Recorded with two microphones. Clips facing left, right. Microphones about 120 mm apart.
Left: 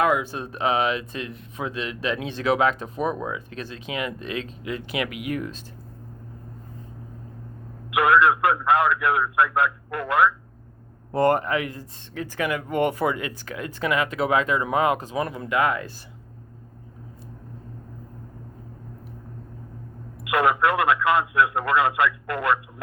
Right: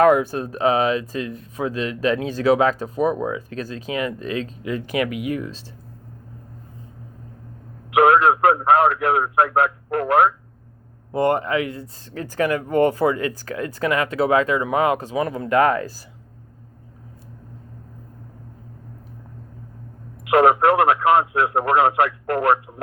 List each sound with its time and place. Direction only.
0.0 s speech: 40° right (ahead or behind)
7.9 s speech: 45° right (ahead or behind)
11.1 s speech: 20° right (ahead or behind)
15.4 s speech: 40° right (ahead or behind)
20.2 s speech: 45° right (ahead or behind)